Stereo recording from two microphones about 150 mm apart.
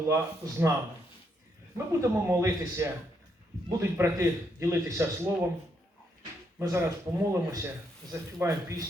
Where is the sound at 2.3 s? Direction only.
20° right (ahead or behind).